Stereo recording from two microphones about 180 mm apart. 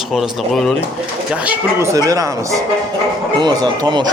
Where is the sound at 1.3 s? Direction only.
10° right (ahead or behind).